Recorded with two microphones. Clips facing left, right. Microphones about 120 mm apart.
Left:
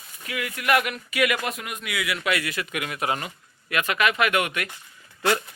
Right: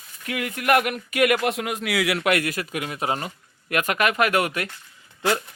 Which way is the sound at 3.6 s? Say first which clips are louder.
Right 1 dB; 45° right (ahead or behind).